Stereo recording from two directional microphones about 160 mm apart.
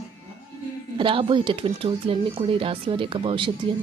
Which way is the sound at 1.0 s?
30° right (ahead or behind).